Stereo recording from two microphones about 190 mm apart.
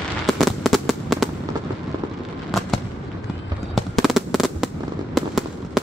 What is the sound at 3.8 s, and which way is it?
Fireworks, centre (ahead or behind).